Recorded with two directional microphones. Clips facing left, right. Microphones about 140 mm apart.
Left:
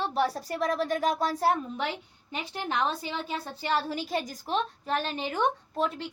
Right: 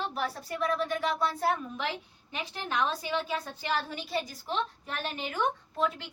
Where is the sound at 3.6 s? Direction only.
30° left (ahead or behind).